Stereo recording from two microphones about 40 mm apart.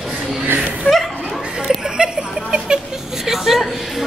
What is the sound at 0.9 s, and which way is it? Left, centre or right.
Speech, left.